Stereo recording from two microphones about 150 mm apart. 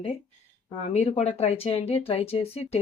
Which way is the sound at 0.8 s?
50° left (ahead or behind).